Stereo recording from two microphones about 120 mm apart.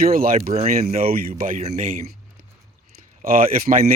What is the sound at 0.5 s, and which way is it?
Speech, 70° right (ahead or behind).